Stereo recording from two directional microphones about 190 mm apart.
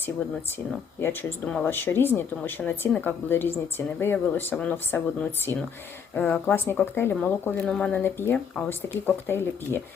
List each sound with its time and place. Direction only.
0.9 s speech: 10° left (ahead or behind)